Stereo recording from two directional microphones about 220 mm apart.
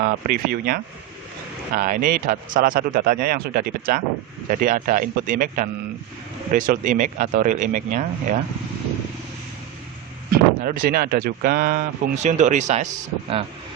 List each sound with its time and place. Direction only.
0.0 s speech: 45° right (ahead or behind)
10.3 s speech: 40° right (ahead or behind)